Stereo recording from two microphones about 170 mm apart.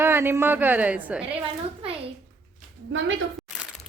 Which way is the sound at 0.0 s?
15° right (ahead or behind).